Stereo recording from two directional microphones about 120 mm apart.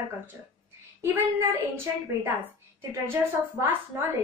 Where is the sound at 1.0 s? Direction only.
20° right (ahead or behind).